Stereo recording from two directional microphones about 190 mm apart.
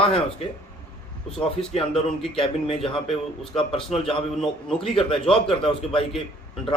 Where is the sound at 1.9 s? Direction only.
Centre (ahead or behind).